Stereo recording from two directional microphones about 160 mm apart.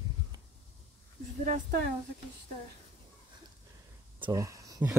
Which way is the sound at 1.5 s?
70° right (ahead or behind).